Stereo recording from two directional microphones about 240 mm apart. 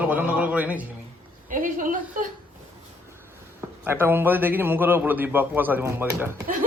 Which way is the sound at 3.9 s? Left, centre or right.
Centre.